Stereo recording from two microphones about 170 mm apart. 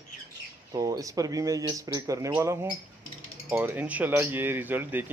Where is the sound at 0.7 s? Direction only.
20° right (ahead or behind).